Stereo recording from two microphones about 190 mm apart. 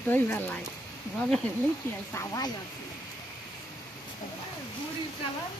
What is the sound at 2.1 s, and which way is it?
Speech, 15° left (ahead or behind).